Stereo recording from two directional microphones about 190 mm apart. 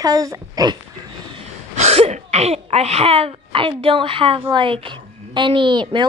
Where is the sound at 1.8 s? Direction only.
35° right (ahead or behind).